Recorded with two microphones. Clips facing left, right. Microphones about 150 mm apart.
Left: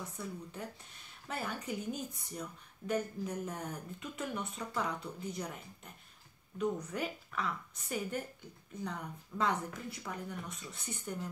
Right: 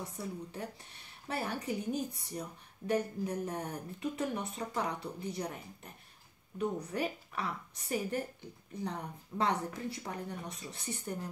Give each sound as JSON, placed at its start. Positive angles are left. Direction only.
{"t": 0.0, "sound": "speech", "side_deg": -30}
{"t": 6.6, "sound": "speech", "side_deg": -30}